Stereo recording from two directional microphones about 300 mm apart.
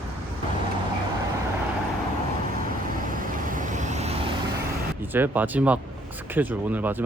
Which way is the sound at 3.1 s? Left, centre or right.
Right.